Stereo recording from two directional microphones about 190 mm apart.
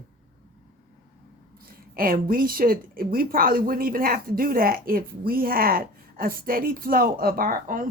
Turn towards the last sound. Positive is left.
turn(degrees=-45)  # may be behind; listen again after turning